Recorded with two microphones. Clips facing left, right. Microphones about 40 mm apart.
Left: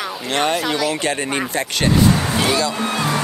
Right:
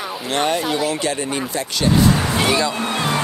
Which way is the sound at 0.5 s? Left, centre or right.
Left.